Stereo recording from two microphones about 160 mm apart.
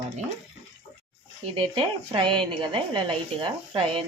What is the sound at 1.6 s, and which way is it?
A woman's voice, 35° right (ahead or behind).